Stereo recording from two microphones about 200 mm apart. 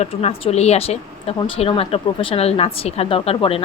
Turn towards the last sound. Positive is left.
turn(degrees=30)  # may be behind; listen again after turning